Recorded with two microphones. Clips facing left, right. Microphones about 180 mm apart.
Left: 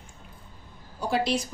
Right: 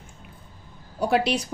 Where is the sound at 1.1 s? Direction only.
65° right (ahead or behind).